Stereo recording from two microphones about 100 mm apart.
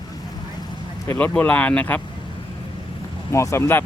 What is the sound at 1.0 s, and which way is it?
Speech, 25° left (ahead or behind).